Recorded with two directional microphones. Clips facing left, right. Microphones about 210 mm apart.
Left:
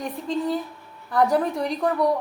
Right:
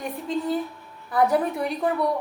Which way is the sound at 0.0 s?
Centre (ahead or behind).